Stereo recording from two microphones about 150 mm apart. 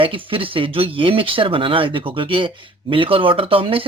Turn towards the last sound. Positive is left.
turn(degrees=-40)  # may be behind; listen again after turning